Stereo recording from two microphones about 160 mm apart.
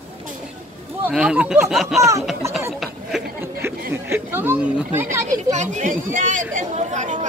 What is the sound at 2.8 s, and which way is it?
Speech, centre (ahead or behind).